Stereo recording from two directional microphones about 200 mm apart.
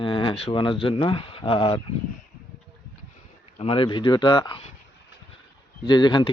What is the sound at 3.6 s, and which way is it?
Speech, 25° left (ahead or behind).